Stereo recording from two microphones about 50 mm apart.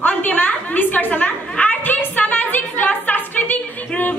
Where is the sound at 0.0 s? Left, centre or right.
Left.